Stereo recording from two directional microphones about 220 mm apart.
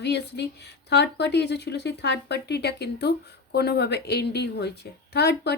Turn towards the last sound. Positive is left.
turn(degrees=50)  # may be behind; listen again after turning